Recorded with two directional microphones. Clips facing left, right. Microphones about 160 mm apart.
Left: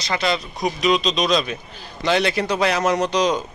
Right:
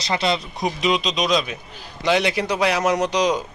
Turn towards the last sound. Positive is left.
turn(degrees=-15)  # may be behind; listen again after turning